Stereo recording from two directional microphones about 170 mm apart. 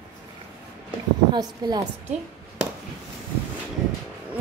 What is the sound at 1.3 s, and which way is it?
Speech, 25° right (ahead or behind).